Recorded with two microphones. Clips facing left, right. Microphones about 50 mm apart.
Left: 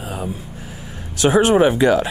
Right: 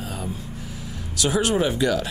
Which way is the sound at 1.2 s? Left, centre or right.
Left.